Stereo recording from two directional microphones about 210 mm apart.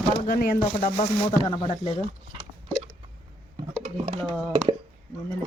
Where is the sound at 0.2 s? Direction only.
45° left (ahead or behind).